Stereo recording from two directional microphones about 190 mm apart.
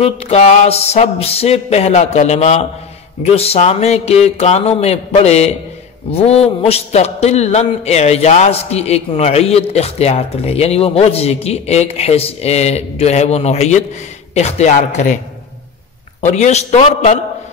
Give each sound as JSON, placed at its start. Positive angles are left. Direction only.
{"t": 0.0, "sound": "a man's voice", "side_deg": 35}
{"t": 16.2, "sound": "a man's voice", "side_deg": 40}